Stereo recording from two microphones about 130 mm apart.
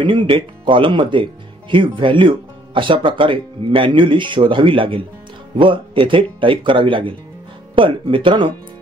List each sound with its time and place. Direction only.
0.0 s speech: 40° right (ahead or behind)